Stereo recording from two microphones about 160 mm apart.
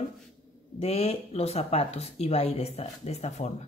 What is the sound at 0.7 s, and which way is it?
Speech, 40° left (ahead or behind).